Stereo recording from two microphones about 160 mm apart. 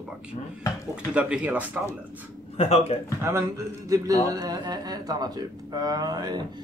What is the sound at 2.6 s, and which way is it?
Speech, 40° left (ahead or behind).